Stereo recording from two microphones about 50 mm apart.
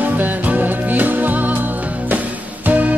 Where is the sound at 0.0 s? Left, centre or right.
Right.